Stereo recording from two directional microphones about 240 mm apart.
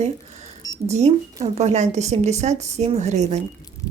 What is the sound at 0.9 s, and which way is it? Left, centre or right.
Speech, right.